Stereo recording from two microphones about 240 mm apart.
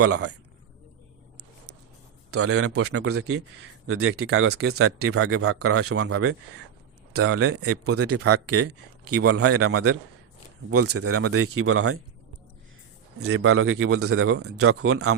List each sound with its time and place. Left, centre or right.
0.0 s speech: right
2.3 s speech: right
13.1 s speech: right